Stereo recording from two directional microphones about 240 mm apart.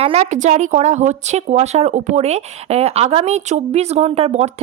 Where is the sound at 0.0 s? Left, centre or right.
Right.